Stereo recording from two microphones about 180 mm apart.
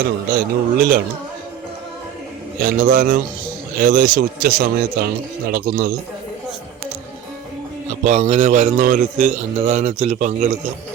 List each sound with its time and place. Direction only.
0.3 s speech: 55° right (ahead or behind)
2.6 s a man's voice: 55° right (ahead or behind)
8.0 s a man's voice: 40° right (ahead or behind)